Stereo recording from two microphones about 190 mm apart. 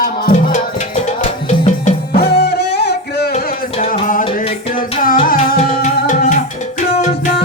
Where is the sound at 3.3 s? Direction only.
35° left (ahead or behind).